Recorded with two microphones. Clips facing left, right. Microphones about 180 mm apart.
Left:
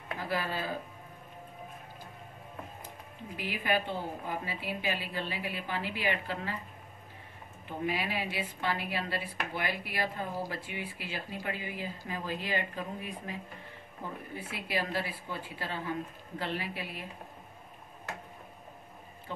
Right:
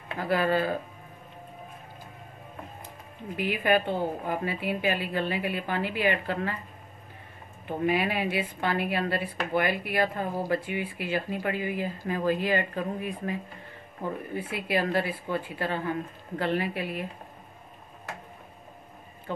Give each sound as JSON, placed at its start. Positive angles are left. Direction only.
{"t": 0.2, "sound": "speech", "side_deg": -60}
{"t": 3.3, "sound": "a woman's voice", "side_deg": -60}
{"t": 7.6, "sound": "a woman's voice", "side_deg": -60}